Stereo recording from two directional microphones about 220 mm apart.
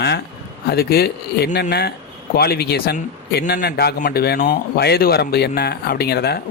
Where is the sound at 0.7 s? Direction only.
45° left (ahead or behind).